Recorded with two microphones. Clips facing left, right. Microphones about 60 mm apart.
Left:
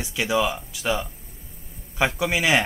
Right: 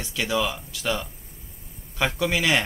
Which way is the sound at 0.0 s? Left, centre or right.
Centre.